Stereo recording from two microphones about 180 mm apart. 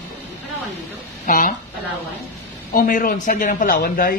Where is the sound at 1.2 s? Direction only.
50° left (ahead or behind).